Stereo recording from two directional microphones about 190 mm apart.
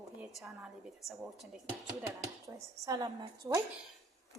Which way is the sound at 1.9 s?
15° right (ahead or behind).